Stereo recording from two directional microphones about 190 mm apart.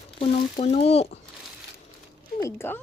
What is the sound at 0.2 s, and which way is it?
Speech, 35° left (ahead or behind).